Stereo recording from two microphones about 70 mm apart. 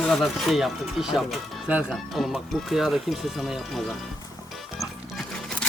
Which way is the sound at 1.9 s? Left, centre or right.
Centre.